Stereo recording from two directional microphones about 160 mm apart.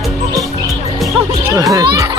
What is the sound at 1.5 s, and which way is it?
Children playing, 20° right (ahead or behind).